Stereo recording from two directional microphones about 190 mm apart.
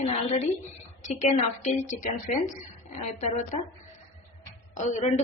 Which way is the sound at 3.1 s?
40° left (ahead or behind).